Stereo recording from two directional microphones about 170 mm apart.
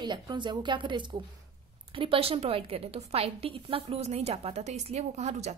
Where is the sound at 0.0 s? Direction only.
25° right (ahead or behind).